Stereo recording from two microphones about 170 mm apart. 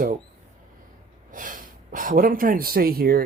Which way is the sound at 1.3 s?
50° right (ahead or behind).